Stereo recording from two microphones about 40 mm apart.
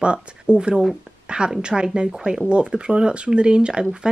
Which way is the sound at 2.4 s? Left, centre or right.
Right.